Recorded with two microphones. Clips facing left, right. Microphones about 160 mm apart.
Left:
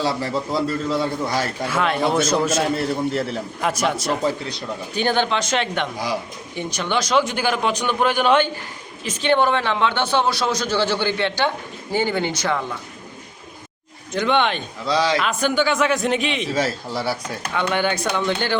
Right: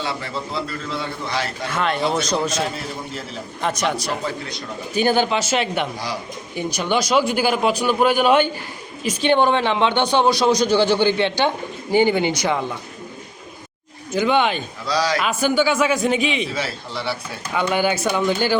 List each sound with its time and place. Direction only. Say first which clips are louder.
0.0 s a man's voice: left 4 dB; 35° left (ahead or behind)
1.7 s speech: left 1 dB; 5° left (ahead or behind)
2.6 s a man's voice: left 5 dB; 60° left (ahead or behind)
3.6 s speech: even; 5° left (ahead or behind); by 12.6 s 15° right (ahead or behind)
14.1 s speech: right 1 dB; 5° right (ahead or behind)
14.8 s a man's voice: left 2 dB; 25° left (ahead or behind)
15.2 s speech: right 1 dB; 5° right (ahead or behind)
16.5 s speech: left 4 dB; 45° left (ahead or behind)
17.5 s speech: right 2 dB; 5° right (ahead or behind)